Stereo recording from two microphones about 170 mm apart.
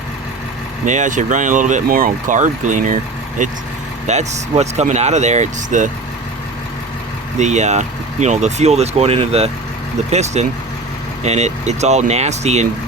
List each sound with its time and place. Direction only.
0.9 s speech: 45° right (ahead or behind)
7.3 s speech: 45° right (ahead or behind)